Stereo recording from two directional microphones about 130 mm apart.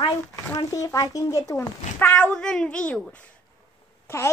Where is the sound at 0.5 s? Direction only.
25° left (ahead or behind); by 3.2 s 5° left (ahead or behind).